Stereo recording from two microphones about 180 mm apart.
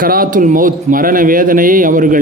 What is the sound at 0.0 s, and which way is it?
A man's voice, 50° right (ahead or behind).